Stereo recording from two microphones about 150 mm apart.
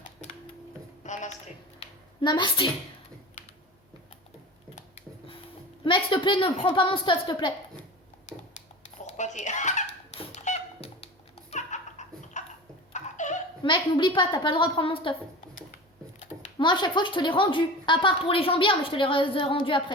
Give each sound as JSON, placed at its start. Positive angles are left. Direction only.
{"t": 1.0, "sound": "a sound", "side_deg": 55}
{"t": 2.2, "sound": "a woman's voice", "side_deg": 30}
{"t": 5.8, "sound": "a woman's voice", "side_deg": 35}
{"t": 9.0, "sound": "a sound", "side_deg": 55}
{"t": 13.6, "sound": "a woman's voice", "side_deg": 30}
{"t": 16.6, "sound": "a woman's voice", "side_deg": 30}